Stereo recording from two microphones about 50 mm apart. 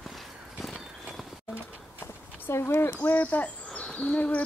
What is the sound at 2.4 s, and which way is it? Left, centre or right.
Speech, left.